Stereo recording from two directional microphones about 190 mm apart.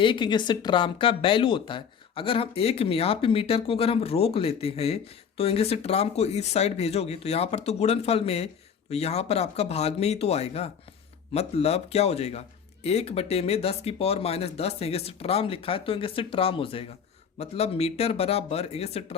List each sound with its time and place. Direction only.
0.0 s speech: 25° left (ahead or behind)